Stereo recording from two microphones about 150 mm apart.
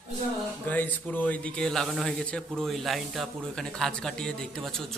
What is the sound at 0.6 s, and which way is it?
A man's voice, 10° left (ahead or behind).